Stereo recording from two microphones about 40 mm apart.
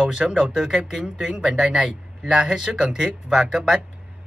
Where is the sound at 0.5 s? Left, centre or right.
Centre.